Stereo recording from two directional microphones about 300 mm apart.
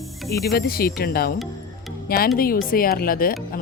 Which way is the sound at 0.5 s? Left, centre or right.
Left.